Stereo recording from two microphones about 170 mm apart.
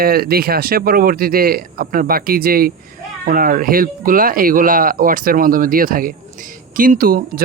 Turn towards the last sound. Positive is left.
turn(degrees=-60)  # may be behind; listen again after turning